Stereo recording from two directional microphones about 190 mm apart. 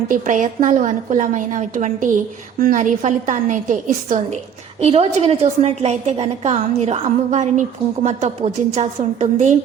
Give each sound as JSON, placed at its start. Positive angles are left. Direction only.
{"t": 0.1, "sound": "a woman's voice", "side_deg": -45}